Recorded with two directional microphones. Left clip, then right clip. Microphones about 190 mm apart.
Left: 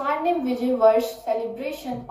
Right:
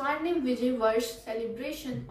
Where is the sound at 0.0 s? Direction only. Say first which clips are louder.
Left 6 dB; 35° right (ahead or behind).